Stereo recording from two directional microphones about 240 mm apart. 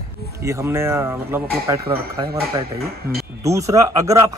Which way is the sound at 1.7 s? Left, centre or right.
Right.